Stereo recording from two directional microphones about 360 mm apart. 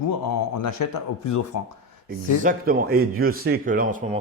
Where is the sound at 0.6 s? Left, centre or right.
Left.